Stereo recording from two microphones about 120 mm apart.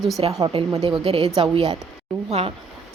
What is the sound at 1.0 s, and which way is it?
Speech, 50° right (ahead or behind).